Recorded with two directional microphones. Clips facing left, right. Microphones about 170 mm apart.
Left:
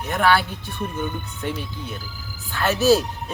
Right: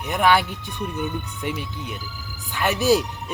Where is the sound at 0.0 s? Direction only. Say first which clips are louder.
Even; 15° right (ahead or behind).